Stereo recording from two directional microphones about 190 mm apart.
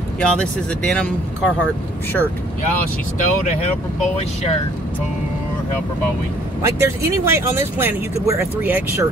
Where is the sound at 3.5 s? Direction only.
35° left (ahead or behind).